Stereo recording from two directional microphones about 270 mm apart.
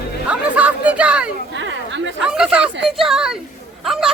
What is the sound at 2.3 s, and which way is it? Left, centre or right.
Speech, centre.